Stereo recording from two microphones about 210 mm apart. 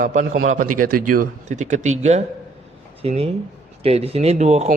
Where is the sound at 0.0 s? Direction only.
40° right (ahead or behind).